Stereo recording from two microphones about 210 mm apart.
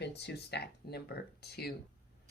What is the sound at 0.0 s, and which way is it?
Speech, 55° left (ahead or behind).